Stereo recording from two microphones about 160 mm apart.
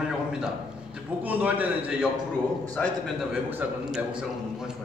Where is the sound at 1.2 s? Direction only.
10° right (ahead or behind).